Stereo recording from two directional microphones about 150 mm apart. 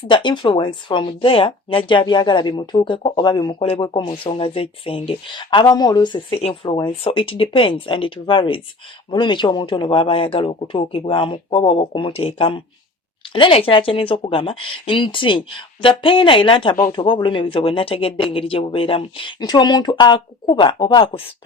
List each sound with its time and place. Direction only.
0.1 s speech: 35° left (ahead or behind)
3.6 s speech: 40° left (ahead or behind)
3.8 s speech: 30° left (ahead or behind)